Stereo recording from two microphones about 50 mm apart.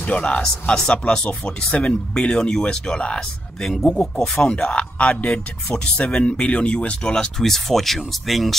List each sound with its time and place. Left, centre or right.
0.0 s speech: left; by 8.5 s centre